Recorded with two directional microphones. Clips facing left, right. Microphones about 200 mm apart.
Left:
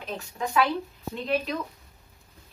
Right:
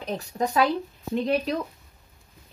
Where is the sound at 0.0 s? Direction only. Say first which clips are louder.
Right 5 dB; 40° right (ahead or behind).